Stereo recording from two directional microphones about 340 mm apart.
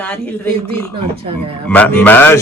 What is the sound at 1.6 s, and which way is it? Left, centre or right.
Speech, centre.